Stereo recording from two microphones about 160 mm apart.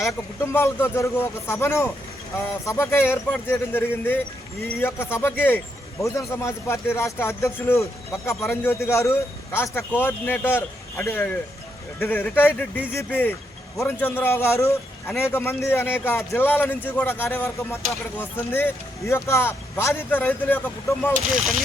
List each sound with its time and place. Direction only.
0.1 s speech: 15° left (ahead or behind)